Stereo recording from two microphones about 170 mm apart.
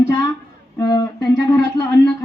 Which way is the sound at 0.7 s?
20° left (ahead or behind).